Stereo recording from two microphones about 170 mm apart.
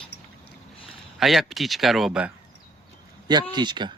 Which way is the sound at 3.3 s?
25° right (ahead or behind).